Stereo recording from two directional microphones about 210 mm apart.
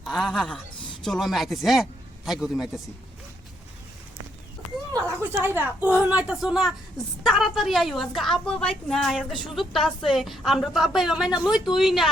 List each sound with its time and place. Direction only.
0.0 s a man's voice: centre (ahead or behind)
4.9 s a woman's voice: 10° right (ahead or behind)